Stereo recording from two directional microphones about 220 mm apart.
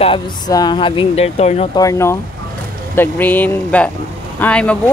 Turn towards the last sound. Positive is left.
turn(degrees=5)  # may be behind; listen again after turning